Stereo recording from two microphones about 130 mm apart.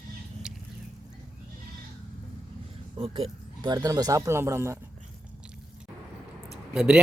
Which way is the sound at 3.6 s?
30° right (ahead or behind).